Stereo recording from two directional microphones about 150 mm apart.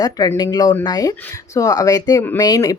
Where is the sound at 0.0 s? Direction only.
25° left (ahead or behind).